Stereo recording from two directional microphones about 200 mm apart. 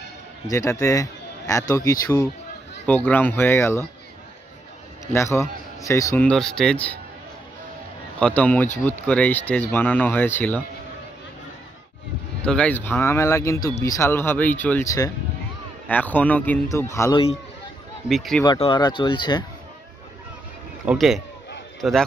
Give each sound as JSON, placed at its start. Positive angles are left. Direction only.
{"t": 0.5, "sound": "speech", "side_deg": 15}
{"t": 5.0, "sound": "speech", "side_deg": 15}
{"t": 8.2, "sound": "speech", "side_deg": 5}
{"t": 12.4, "sound": "speech", "side_deg": 5}
{"t": 18.0, "sound": "speech", "side_deg": 0}
{"t": 18.4, "sound": "speech", "side_deg": 20}
{"t": 20.8, "sound": "speech", "side_deg": -5}